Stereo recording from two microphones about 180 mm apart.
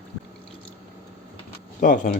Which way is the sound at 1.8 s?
50° left (ahead or behind).